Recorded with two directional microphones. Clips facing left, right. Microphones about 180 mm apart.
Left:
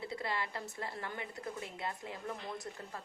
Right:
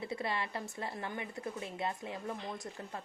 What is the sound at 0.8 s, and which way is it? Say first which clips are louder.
A woman's voice: right 2 dB; 20° right (ahead or behind).